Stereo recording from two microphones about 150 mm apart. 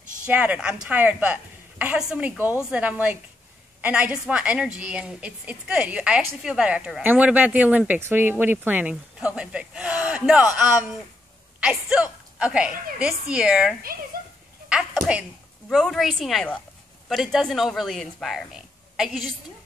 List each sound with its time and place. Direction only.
0.2 s a woman's voice: 10° right (ahead or behind)
14.7 s a sound: 5° right (ahead or behind)
15.7 s speech: centre (ahead or behind)